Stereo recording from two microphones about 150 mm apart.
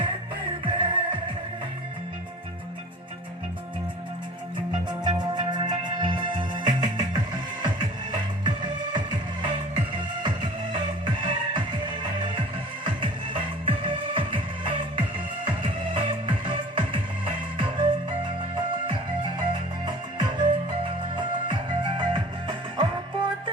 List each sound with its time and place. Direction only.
0.6 s music: 35° right (ahead or behind)
4.5 s music: 30° right (ahead or behind)